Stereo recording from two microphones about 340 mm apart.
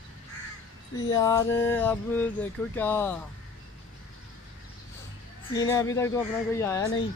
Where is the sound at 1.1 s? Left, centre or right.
Centre.